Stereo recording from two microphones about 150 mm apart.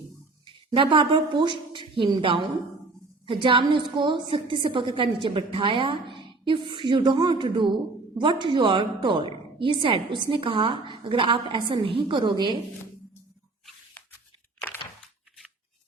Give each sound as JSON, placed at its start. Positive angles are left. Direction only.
{"t": 0.7, "sound": "a woman's voice", "side_deg": -35}